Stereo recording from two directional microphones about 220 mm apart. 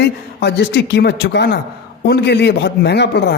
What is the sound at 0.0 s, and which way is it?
A woman's voice, 50° left (ahead or behind).